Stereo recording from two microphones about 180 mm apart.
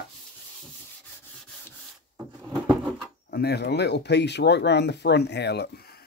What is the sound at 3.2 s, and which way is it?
Speech, 60° left (ahead or behind).